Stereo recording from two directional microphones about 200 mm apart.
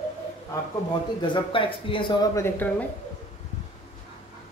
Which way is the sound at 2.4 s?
10° left (ahead or behind).